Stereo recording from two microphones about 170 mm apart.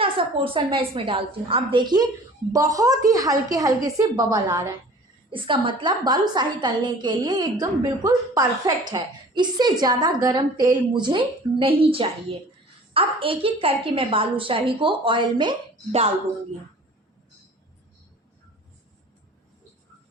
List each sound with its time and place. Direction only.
0.0 s a woman's voice: 30° right (ahead or behind)